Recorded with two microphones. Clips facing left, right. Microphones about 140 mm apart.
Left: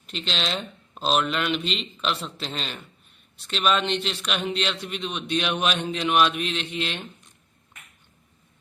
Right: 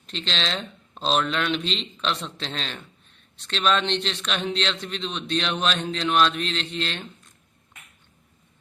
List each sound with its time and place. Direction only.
0.0 s a man's voice: 5° left (ahead or behind)